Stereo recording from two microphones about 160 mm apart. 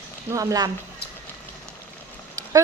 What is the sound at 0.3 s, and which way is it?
Speech, 20° right (ahead or behind).